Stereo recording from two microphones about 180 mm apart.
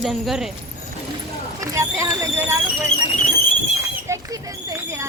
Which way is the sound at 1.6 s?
15° right (ahead or behind).